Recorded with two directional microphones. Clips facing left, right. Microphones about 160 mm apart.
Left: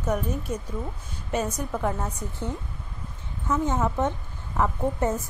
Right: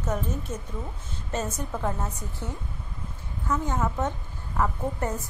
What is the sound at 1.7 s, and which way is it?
Speech, centre (ahead or behind).